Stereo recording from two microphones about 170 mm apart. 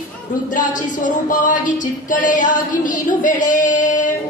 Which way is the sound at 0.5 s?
50° left (ahead or behind).